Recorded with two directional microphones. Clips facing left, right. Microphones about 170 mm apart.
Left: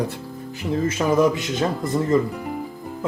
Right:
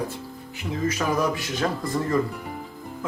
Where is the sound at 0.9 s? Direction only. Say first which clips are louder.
Left 6 dB; 20° left (ahead or behind).